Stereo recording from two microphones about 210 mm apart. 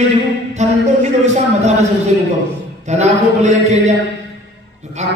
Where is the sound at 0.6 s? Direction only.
35° right (ahead or behind).